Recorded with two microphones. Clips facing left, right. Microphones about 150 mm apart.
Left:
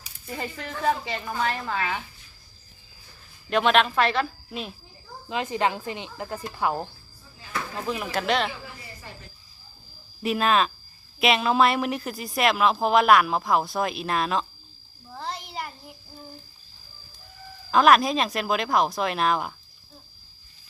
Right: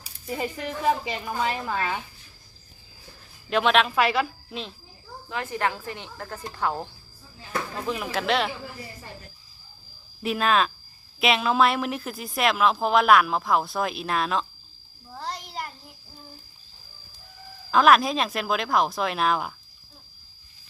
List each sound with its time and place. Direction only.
0.3 s a woman's voice: 15° right (ahead or behind)
3.5 s speech: centre (ahead or behind)
5.3 s speech: 20° left (ahead or behind)
7.9 s speech: centre (ahead or behind)
10.2 s speech: centre (ahead or behind)
15.1 s a sound: centre (ahead or behind)
17.7 s speech: centre (ahead or behind)